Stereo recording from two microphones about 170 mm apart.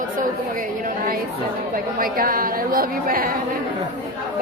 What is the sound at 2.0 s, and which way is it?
A woman's voice, 55° right (ahead or behind).